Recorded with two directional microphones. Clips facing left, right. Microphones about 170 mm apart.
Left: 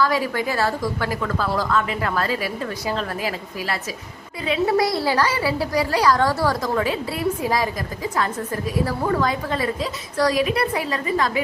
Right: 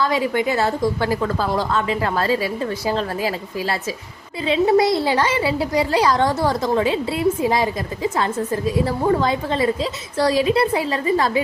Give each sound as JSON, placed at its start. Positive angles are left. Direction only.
{"t": 0.0, "sound": "a woman's voice", "side_deg": -20}